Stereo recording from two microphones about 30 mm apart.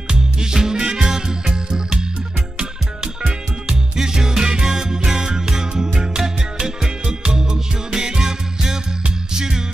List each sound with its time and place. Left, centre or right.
0.1 s music: centre
3.0 s music: right
7.1 s music: right